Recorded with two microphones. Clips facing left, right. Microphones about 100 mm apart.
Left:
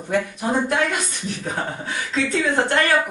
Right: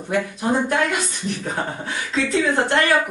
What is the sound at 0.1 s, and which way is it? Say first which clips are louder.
Speech: right 1 dB; centre (ahead or behind).